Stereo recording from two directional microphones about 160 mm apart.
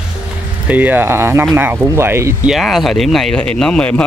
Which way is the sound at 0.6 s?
10° right (ahead or behind).